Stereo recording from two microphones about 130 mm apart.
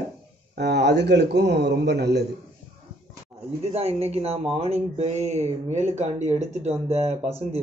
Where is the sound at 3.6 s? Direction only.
55° right (ahead or behind).